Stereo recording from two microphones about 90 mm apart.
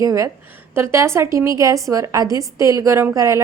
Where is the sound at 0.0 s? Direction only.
35° right (ahead or behind).